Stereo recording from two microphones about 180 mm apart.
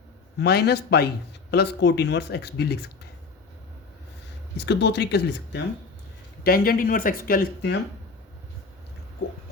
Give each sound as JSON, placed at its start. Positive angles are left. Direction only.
{"t": 0.3, "sound": "speech", "side_deg": 65}
{"t": 4.5, "sound": "speech", "side_deg": 75}
{"t": 6.4, "sound": "speech", "side_deg": 55}